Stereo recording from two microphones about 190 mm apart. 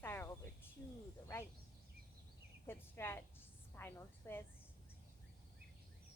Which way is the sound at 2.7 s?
10° left (ahead or behind).